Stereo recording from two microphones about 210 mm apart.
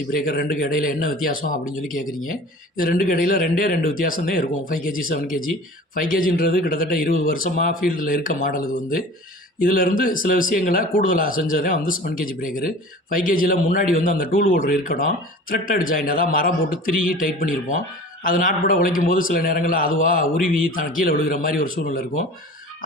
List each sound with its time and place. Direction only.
0.1 s a man's voice: 45° left (ahead or behind)